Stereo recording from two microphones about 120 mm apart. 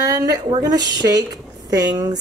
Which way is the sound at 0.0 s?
30° right (ahead or behind).